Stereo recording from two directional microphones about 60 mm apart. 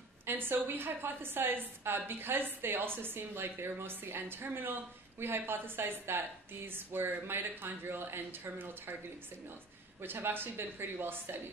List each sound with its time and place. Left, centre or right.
0.3 s a woman's voice: right
10.0 s a woman's voice: right